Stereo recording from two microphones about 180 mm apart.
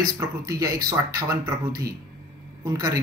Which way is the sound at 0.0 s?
20° right (ahead or behind).